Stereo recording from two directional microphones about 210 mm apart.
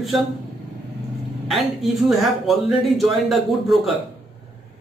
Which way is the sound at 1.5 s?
Centre (ahead or behind).